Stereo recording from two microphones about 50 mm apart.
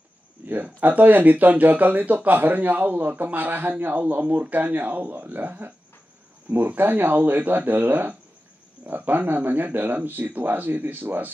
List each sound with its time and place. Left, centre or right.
0.7 s speech: right